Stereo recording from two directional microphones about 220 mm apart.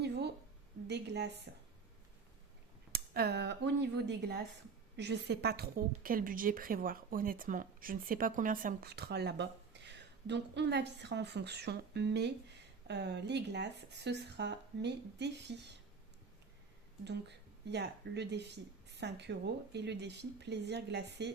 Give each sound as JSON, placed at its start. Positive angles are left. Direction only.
{"t": 0.0, "sound": "a sound", "side_deg": -50}
{"t": 0.9, "sound": "a woman's voice", "side_deg": -50}
{"t": 2.9, "sound": "a woman's voice", "side_deg": -45}
{"t": 17.0, "sound": "a woman's voice", "side_deg": -50}